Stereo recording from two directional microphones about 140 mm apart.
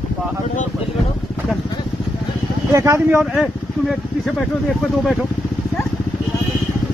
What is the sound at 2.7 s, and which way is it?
Speech, 20° right (ahead or behind).